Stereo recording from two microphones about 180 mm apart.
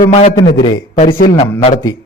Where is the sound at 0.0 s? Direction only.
40° left (ahead or behind).